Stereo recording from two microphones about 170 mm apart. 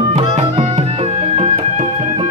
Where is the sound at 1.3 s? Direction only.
45° right (ahead or behind).